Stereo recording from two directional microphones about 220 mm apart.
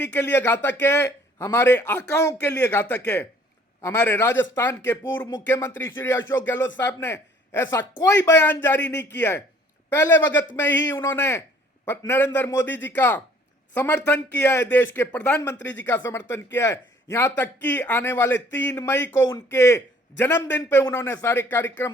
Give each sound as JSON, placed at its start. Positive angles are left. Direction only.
{"t": 0.0, "sound": "speech", "side_deg": 10}